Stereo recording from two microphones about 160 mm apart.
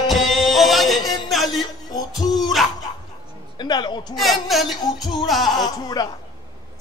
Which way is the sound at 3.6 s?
25° left (ahead or behind).